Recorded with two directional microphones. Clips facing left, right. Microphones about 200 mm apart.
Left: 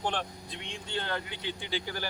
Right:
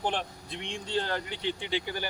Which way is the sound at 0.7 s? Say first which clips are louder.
Right 4 dB; 30° right (ahead or behind).